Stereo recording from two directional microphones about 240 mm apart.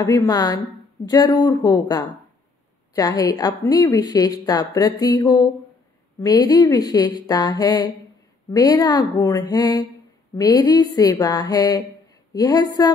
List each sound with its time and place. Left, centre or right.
0.0 s speech: centre